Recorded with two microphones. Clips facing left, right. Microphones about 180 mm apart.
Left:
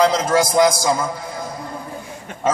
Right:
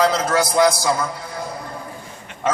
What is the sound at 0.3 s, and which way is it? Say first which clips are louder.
Speech: left 1 dB; 15° left (ahead or behind).